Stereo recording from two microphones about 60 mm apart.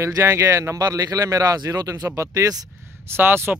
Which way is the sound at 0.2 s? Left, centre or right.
Right.